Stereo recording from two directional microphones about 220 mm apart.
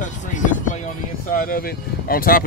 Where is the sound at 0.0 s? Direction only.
35° left (ahead or behind).